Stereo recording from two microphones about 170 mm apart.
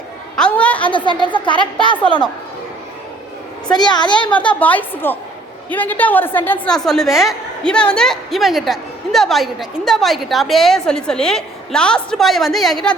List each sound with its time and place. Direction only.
0.3 s a woman's voice: 5° left (ahead or behind)
0.9 s speech: 30° left (ahead or behind)
3.7 s speech: 25° left (ahead or behind)
4.6 s a woman's voice: 10° left (ahead or behind)